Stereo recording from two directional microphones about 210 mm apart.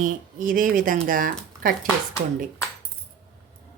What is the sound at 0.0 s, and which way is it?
A woman's voice, 40° right (ahead or behind).